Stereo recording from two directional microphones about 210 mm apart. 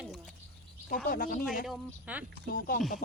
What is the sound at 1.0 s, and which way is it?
Speech, 40° left (ahead or behind).